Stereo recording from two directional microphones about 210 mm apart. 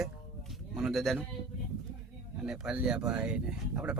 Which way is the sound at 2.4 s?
5° right (ahead or behind).